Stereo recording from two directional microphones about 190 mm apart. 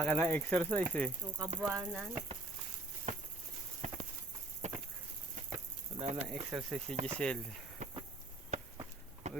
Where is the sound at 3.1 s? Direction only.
35° right (ahead or behind).